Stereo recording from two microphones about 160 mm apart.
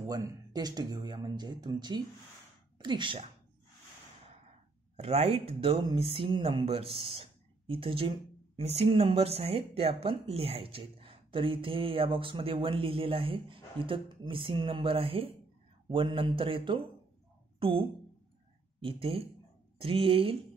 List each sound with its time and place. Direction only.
0.0 s speech: 25° right (ahead or behind)
4.9 s speech: 40° right (ahead or behind)